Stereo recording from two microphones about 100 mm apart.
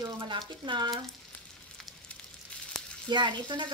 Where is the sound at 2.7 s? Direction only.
Centre (ahead or behind).